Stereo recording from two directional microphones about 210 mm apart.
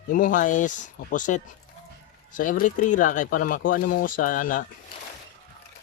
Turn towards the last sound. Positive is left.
turn(degrees=40)  # may be behind; listen again after turning